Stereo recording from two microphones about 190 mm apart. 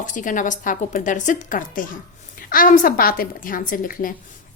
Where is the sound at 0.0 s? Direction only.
40° left (ahead or behind).